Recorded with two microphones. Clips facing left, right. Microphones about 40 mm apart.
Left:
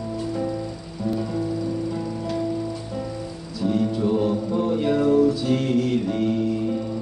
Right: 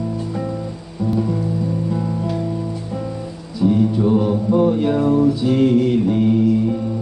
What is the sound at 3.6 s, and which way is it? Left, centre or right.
Music, right.